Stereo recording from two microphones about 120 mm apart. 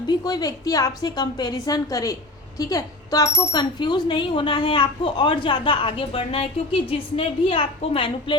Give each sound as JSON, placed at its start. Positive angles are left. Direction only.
{"t": 0.1, "sound": "a woman's voice", "side_deg": 35}